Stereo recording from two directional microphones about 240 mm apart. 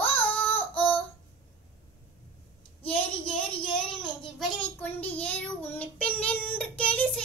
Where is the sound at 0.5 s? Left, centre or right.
Centre.